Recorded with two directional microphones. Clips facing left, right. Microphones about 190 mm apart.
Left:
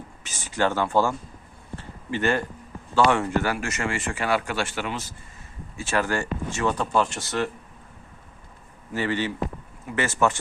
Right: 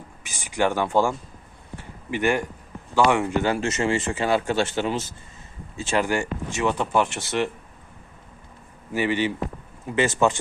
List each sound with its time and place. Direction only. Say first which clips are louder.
0.2 s speech: right 1 dB; 10° right (ahead or behind)
1.7 s a sound: even; 15° right (ahead or behind)
2.9 s speech: right 1 dB; 15° right (ahead or behind)
8.9 s speech: right 3 dB; 15° right (ahead or behind)